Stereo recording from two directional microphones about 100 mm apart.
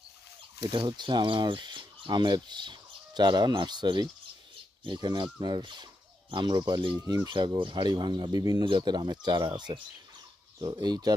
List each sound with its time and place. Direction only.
0.6 s speech: 50° right (ahead or behind)